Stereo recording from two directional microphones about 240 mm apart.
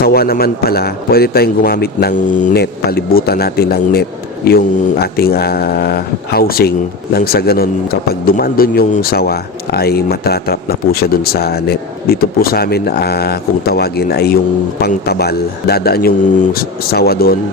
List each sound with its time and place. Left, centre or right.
0.0 s speech: left